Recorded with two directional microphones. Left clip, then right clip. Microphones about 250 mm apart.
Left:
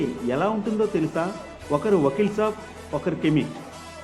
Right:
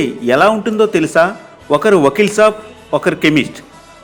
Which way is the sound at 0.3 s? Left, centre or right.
Right.